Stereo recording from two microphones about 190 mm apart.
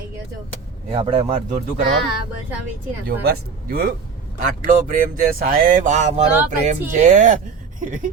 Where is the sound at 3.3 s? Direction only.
50° right (ahead or behind).